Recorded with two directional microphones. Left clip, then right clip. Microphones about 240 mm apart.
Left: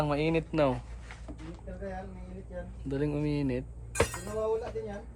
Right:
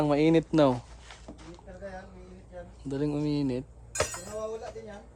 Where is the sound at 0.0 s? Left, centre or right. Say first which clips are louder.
Right 5 dB; right.